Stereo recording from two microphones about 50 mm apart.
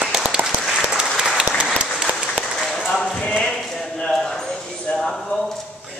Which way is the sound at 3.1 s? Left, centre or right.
Centre.